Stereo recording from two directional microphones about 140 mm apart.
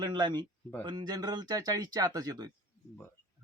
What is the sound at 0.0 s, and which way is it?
Speech, 35° right (ahead or behind).